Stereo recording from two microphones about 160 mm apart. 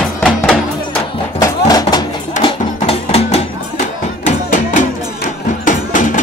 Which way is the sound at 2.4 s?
40° left (ahead or behind).